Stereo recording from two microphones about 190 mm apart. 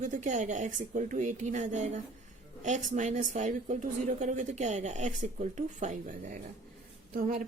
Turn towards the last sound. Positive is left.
turn(degrees=-45)  # may be behind; listen again after turning